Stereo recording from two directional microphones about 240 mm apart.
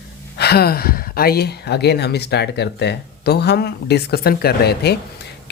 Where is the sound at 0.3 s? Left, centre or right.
Left.